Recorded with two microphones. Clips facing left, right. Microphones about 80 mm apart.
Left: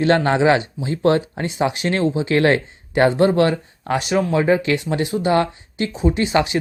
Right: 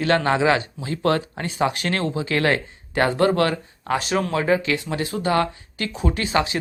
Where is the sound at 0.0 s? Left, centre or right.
Left.